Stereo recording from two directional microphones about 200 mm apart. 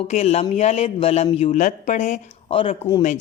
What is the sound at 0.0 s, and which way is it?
A woman's voice, 30° left (ahead or behind).